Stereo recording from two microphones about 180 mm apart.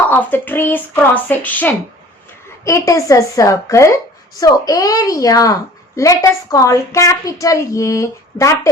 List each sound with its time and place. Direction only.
0.1 s a woman's voice: 10° left (ahead or behind)